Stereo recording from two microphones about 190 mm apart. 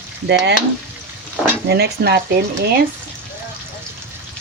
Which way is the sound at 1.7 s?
60° right (ahead or behind).